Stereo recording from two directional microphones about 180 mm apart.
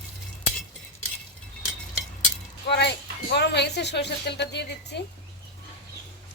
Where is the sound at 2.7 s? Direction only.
70° left (ahead or behind).